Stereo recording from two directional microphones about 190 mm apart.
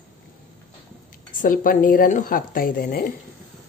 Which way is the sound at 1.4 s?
45° left (ahead or behind).